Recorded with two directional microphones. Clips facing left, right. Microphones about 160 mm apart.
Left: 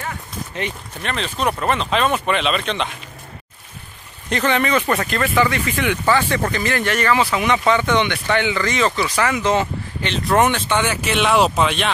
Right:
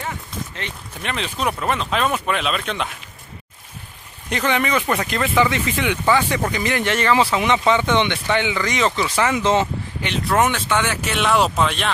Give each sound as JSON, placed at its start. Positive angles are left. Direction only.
{"t": 1.0, "sound": "speech", "side_deg": -10}
{"t": 4.3, "sound": "speech", "side_deg": -10}
{"t": 10.0, "sound": "speech", "side_deg": -5}